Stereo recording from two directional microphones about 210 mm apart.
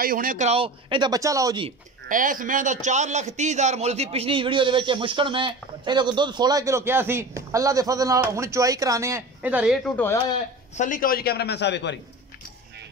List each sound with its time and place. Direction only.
0.0 s a man's voice: 40° right (ahead or behind); by 1.7 s 20° right (ahead or behind)
2.0 s a man's voice: 40° right (ahead or behind); by 9.9 s 5° right (ahead or behind)
10.8 s a man's voice: 40° left (ahead or behind); by 12.0 s 55° left (ahead or behind)